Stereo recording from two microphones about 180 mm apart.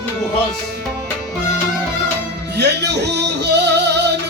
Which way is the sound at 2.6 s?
70° right (ahead or behind).